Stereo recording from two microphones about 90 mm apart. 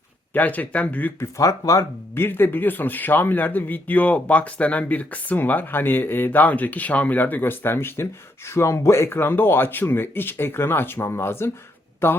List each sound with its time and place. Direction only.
0.3 s speech: 20° left (ahead or behind)
1.4 s speech: 40° left (ahead or behind)
2.1 s a man's voice: 25° left (ahead or behind)